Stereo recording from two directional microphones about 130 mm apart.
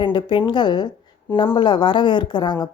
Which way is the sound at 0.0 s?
40° left (ahead or behind).